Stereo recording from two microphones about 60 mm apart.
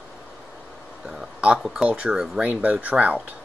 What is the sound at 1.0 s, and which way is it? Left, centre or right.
Speech, centre.